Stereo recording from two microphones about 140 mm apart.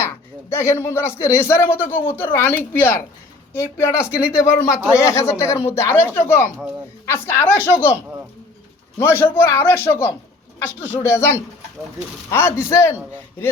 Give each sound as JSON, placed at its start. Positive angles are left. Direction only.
{"t": 0.5, "sound": "speech", "side_deg": 15}
{"t": 9.0, "sound": "speech", "side_deg": 15}